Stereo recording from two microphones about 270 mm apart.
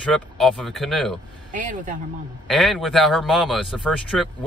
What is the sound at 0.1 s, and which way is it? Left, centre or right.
Speech, centre.